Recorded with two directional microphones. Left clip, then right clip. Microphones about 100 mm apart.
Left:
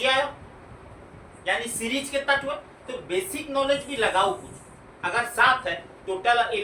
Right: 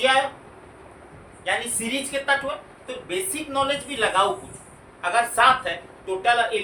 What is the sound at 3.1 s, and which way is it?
A woman's voice, 35° right (ahead or behind).